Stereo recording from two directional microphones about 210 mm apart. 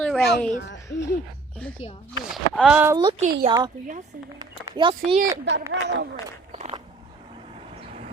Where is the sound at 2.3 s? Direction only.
Centre (ahead or behind).